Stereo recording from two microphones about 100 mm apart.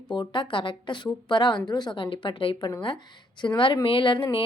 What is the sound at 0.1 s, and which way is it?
A woman's voice, 50° left (ahead or behind).